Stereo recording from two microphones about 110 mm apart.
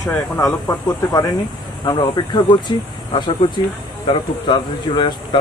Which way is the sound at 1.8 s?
45° left (ahead or behind).